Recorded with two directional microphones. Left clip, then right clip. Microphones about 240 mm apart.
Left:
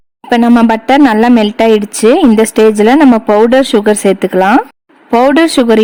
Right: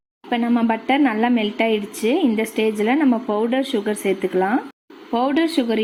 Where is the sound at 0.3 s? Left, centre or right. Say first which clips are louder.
Left 12 dB; left.